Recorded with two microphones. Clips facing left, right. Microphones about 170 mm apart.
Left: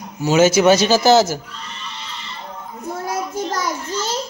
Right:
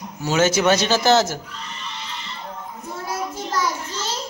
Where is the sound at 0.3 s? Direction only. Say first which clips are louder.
Left 5 dB; 10° left (ahead or behind).